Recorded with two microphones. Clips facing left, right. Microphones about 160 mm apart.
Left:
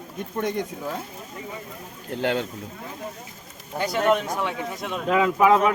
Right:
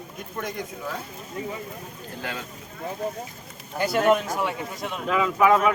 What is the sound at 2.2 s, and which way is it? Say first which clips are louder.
Speech: left 10 dB; 70° left (ahead or behind).